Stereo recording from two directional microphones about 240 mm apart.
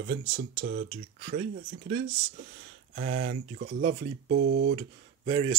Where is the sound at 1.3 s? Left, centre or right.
Right.